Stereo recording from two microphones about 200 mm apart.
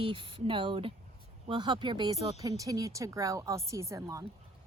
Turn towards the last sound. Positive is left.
turn(degrees=-15)  # may be behind; listen again after turning